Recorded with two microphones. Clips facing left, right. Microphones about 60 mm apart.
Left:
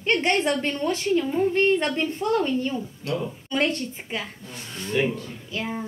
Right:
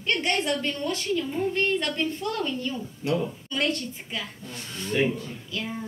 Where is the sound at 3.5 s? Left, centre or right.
Left.